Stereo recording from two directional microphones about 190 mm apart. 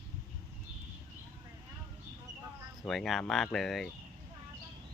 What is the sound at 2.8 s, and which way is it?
Speech, centre (ahead or behind).